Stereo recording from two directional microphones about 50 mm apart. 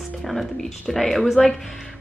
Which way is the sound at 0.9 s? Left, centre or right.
Centre.